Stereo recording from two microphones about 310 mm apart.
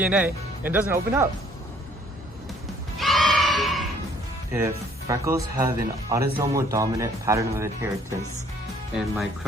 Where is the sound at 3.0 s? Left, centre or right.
Centre.